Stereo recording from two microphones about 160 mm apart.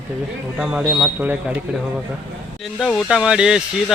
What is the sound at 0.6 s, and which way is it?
Speech, 10° right (ahead or behind).